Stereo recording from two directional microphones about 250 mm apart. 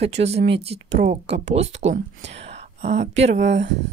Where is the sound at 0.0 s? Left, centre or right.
Right.